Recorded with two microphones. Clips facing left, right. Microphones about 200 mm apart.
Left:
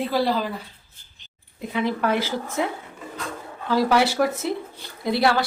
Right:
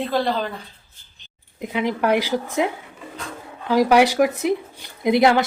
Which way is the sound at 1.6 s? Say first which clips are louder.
Right 2 dB; 15° right (ahead or behind).